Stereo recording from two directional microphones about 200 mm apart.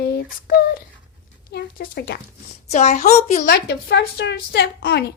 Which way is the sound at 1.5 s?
50° left (ahead or behind).